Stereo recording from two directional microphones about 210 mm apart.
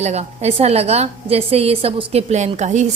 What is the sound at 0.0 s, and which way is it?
A woman's voice, 30° right (ahead or behind).